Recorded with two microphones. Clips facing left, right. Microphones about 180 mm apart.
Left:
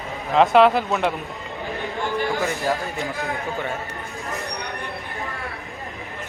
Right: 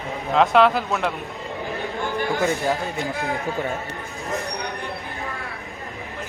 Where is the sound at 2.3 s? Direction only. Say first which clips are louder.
Right 2 dB; 20° right (ahead or behind).